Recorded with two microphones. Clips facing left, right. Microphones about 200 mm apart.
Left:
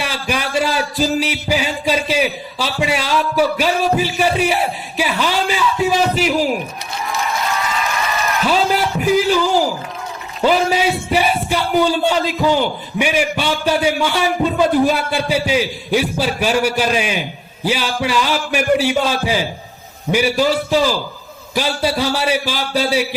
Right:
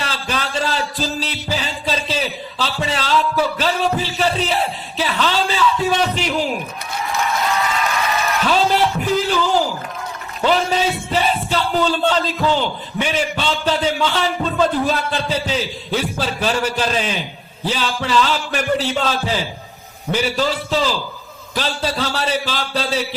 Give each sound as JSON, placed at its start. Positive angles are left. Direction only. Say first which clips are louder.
{"t": 0.0, "sound": "music", "louder": "left 3 dB", "side_deg": 10}
{"t": 8.4, "sound": "a sound", "louder": "even", "side_deg": 10}
{"t": 10.4, "sound": "speech", "louder": "left 2 dB", "side_deg": 10}